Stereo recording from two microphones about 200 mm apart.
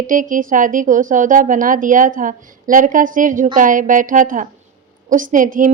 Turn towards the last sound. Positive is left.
turn(degrees=-40)  # may be behind; listen again after turning